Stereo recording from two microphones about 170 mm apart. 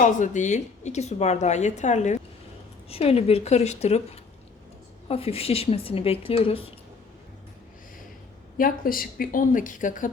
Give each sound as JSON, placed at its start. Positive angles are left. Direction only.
{"t": 0.0, "sound": "a woman's voice", "side_deg": 45}
{"t": 8.5, "sound": "a woman's voice", "side_deg": 55}